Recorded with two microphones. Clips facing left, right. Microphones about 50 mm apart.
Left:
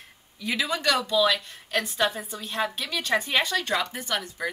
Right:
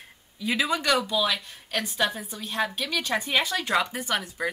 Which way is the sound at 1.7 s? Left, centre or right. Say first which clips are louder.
Left 1 dB; centre.